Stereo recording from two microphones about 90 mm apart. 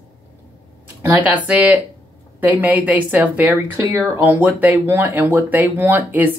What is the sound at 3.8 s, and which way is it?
Speech, 35° right (ahead or behind).